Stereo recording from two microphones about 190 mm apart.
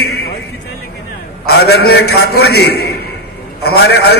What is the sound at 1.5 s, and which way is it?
A man's voice, 60° left (ahead or behind).